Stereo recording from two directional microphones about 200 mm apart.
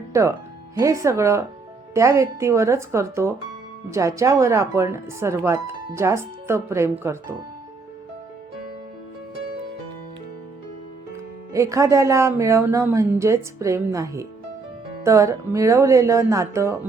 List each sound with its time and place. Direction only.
0.1 s speech: 15° right (ahead or behind)
11.5 s speech: 15° right (ahead or behind)